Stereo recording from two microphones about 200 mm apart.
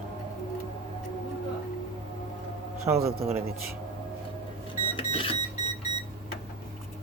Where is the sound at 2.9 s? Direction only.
10° right (ahead or behind).